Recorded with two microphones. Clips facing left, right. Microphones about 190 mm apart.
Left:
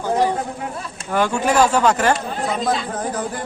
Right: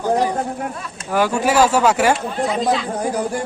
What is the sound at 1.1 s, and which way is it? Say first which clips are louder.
Speech: right 1 dB; 5° right (ahead or behind).